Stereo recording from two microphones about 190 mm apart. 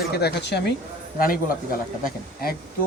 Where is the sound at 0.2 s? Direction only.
60° left (ahead or behind).